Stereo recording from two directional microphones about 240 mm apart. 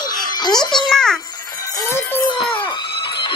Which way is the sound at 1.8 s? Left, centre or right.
Centre.